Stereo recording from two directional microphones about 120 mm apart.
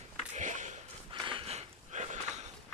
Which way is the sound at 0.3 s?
90° right.